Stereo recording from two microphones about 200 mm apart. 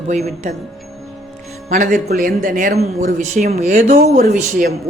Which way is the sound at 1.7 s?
40° right (ahead or behind).